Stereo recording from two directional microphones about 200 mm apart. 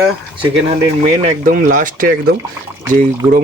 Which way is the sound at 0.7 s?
35° right (ahead or behind).